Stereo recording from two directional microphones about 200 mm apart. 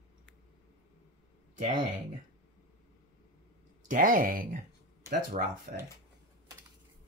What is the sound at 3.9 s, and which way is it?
Speech, 45° right (ahead or behind).